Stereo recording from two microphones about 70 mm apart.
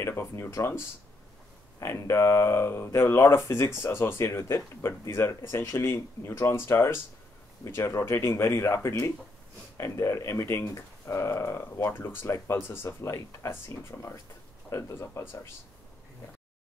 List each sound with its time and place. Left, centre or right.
0.0 s speech: left
13.0 s speech: left